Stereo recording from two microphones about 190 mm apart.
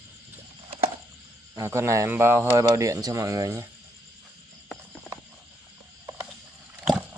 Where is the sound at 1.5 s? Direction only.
15° right (ahead or behind).